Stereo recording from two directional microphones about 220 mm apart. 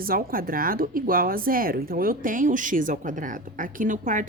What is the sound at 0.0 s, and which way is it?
Speech, 40° right (ahead or behind).